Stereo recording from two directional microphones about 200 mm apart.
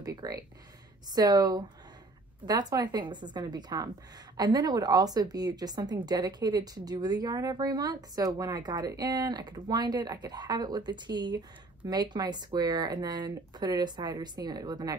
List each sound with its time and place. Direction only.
0.0 s a woman's voice: 20° right (ahead or behind)